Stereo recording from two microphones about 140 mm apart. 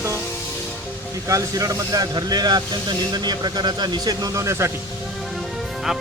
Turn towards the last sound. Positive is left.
turn(degrees=-5)  # may be behind; listen again after turning